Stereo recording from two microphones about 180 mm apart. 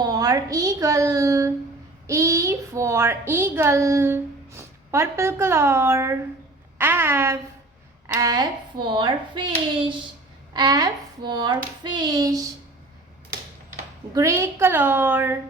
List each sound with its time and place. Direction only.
0.0 s a woman's voice: 20° right (ahead or behind)
14.1 s a woman's voice: 15° right (ahead or behind)